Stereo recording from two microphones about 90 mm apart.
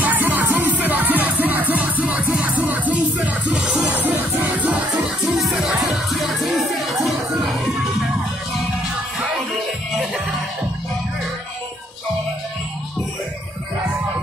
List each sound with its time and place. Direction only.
0.0 s music: 20° right (ahead or behind)
6.0 s music: centre (ahead or behind)